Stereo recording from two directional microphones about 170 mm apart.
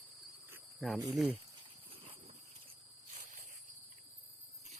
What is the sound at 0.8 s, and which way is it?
Speech, centre (ahead or behind).